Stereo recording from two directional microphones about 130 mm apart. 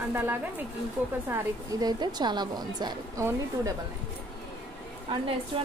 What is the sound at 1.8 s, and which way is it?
A woman's voice, 30° right (ahead or behind).